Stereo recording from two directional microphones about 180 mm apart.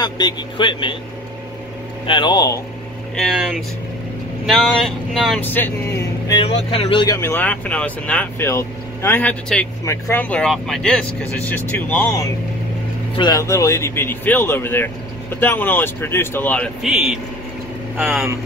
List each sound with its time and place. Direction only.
0.0 s speech: 25° left (ahead or behind)
2.0 s speech: 25° left (ahead or behind)
3.2 s speech: centre (ahead or behind)
5.4 s speech: 10° left (ahead or behind)
6.4 s speech: 35° left (ahead or behind)
7.2 s speech: 10° left (ahead or behind)
13.1 s speech: 20° left (ahead or behind); by 18.2 s 5° right (ahead or behind)